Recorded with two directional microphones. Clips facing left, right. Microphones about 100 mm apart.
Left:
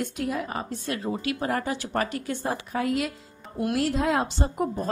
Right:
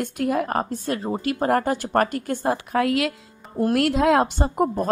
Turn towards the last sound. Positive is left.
turn(degrees=-50)  # may be behind; listen again after turning